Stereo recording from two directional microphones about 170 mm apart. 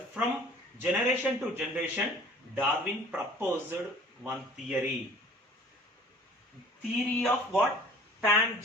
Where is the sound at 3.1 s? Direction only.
15° right (ahead or behind).